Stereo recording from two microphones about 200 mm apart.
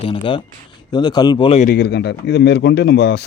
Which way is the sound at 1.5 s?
45° left (ahead or behind).